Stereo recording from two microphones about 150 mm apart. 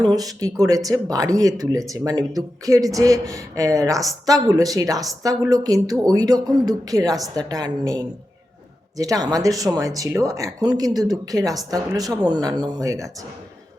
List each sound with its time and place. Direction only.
0.0 s speech: 25° right (ahead or behind)